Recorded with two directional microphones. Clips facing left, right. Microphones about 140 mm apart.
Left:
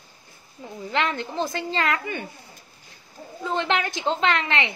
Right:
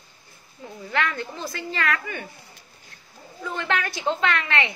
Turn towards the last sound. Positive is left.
turn(degrees=20)  # may be behind; listen again after turning